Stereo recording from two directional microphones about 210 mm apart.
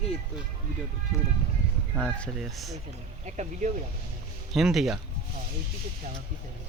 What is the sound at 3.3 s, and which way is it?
Speech, 35° right (ahead or behind).